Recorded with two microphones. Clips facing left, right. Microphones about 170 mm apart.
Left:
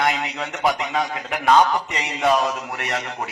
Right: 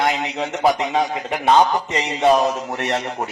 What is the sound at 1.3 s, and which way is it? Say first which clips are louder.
A man's voice: even; 30° right (ahead or behind).